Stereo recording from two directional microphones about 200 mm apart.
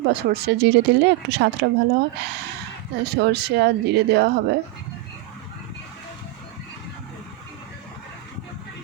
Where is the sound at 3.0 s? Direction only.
55° right (ahead or behind).